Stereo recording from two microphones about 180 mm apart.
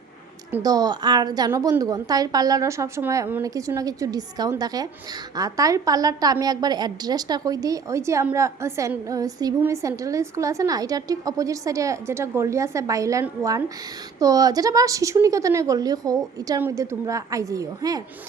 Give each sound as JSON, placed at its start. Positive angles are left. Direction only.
{"t": 0.5, "sound": "a woman's voice", "side_deg": -20}